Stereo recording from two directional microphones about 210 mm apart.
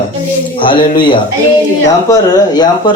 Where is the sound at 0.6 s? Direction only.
25° left (ahead or behind).